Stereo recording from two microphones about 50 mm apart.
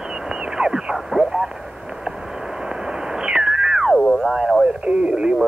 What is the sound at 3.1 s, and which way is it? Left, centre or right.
Cat, centre.